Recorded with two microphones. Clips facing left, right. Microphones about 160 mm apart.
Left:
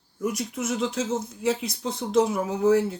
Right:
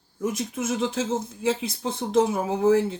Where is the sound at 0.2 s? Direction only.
25° right (ahead or behind).